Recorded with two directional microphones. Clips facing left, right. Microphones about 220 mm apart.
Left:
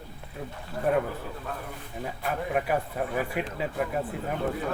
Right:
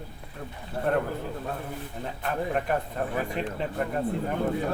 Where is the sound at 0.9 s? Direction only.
5° left (ahead or behind).